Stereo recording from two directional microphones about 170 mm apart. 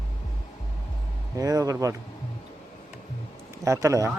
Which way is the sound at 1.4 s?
20° right (ahead or behind).